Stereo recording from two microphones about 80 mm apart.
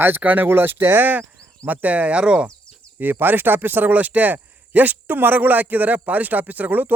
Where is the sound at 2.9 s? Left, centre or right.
Right.